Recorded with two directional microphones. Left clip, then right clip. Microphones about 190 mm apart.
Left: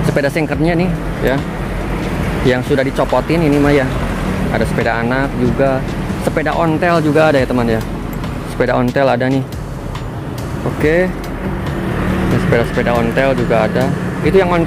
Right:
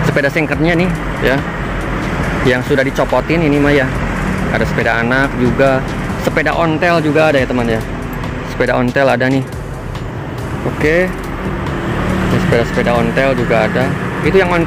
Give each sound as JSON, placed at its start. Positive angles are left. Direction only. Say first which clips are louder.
{"t": 0.1, "sound": "speech", "louder": "right 1 dB", "side_deg": 5}
{"t": 2.4, "sound": "speech", "louder": "right 1 dB", "side_deg": 5}
{"t": 10.8, "sound": "speech", "louder": "right 1 dB", "side_deg": 5}
{"t": 12.5, "sound": "speech", "louder": "right 1 dB", "side_deg": 0}